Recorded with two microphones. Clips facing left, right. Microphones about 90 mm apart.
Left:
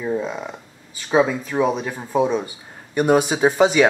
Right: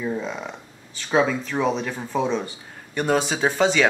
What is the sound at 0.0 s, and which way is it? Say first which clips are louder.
Speech: left 3 dB; 10° left (ahead or behind).